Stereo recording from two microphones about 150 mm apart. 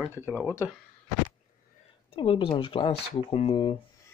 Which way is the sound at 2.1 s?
35° left (ahead or behind).